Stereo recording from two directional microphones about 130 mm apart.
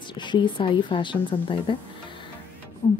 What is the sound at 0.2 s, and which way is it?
Speech, 35° left (ahead or behind).